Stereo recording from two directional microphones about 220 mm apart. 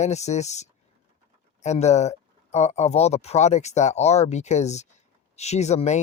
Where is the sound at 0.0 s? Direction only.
30° left (ahead or behind).